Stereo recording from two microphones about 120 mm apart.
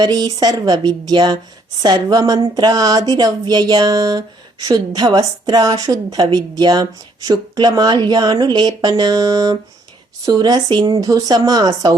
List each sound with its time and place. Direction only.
0.0 s a woman's voice: 35° right (ahead or behind)